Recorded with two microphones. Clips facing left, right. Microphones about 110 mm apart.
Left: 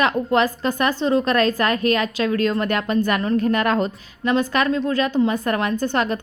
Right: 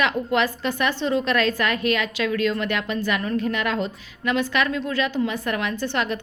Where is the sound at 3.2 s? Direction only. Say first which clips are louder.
Left 5 dB; 30° left (ahead or behind).